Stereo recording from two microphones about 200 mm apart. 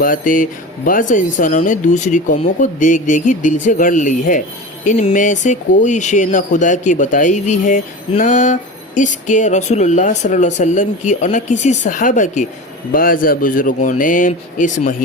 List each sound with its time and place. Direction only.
0.0 s a man's voice: 45° left (ahead or behind)